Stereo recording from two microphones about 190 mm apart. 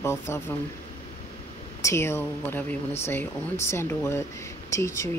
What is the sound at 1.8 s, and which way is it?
Speech, 15° left (ahead or behind).